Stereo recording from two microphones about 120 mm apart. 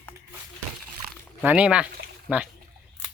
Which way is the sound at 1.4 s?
10° right (ahead or behind).